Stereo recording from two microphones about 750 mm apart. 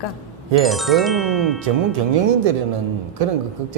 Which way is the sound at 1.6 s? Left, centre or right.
Right.